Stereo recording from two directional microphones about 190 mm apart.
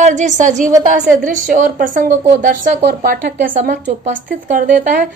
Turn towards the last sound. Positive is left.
turn(degrees=-45)  # may be behind; listen again after turning